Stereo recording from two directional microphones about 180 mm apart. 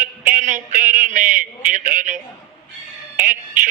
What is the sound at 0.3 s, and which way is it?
A man's voice, 45° right (ahead or behind).